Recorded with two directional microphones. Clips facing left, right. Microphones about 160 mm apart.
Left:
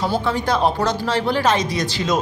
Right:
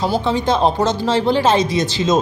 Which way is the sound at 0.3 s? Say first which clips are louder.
Right 4 dB; 25° right (ahead or behind).